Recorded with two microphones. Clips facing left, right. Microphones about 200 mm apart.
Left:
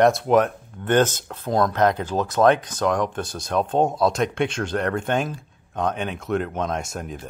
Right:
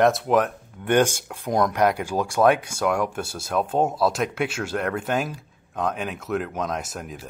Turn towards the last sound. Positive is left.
turn(degrees=0)  # may be behind; listen again after turning